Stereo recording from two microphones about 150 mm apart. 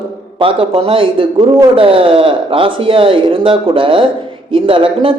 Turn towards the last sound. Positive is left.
turn(degrees=-35)  # may be behind; listen again after turning